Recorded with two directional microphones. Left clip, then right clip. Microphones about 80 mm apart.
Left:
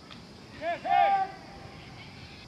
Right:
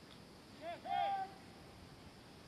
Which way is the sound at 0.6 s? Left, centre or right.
Centre.